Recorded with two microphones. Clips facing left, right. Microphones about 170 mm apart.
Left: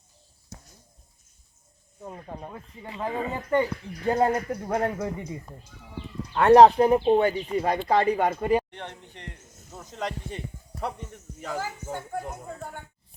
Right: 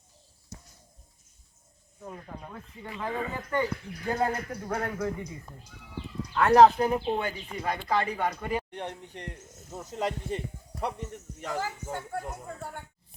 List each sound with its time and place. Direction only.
2.0 s speech: 25° left (ahead or behind)
6.3 s speech: 30° left (ahead or behind)
7.4 s speech: 25° left (ahead or behind)
8.7 s speech: 10° right (ahead or behind); by 11.9 s 10° left (ahead or behind)